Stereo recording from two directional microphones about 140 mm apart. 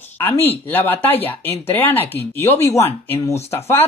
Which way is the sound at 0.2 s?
15° left (ahead or behind).